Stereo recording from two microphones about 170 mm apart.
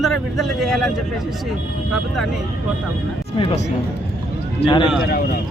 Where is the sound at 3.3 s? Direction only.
30° left (ahead or behind).